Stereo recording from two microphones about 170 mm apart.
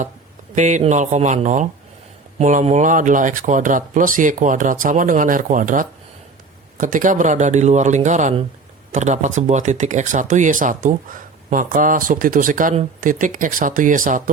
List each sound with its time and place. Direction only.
0.5 s speech: 45° right (ahead or behind)